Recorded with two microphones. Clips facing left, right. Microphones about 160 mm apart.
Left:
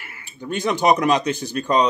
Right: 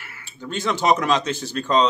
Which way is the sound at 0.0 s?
15° left (ahead or behind).